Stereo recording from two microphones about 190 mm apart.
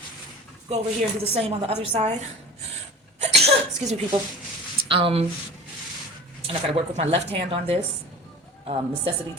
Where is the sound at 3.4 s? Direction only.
35° right (ahead or behind).